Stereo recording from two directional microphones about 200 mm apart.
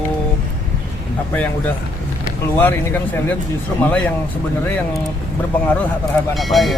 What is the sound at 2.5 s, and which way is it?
Speech, 10° left (ahead or behind).